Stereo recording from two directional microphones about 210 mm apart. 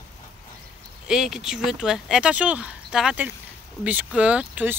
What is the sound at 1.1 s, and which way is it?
Speech, centre (ahead or behind).